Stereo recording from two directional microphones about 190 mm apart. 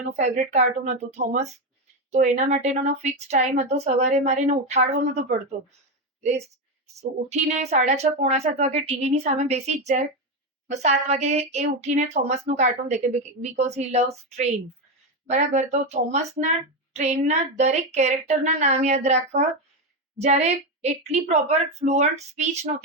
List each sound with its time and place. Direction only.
0.1 s a woman's voice: 35° right (ahead or behind)
6.8 s a woman's voice: 35° right (ahead or behind)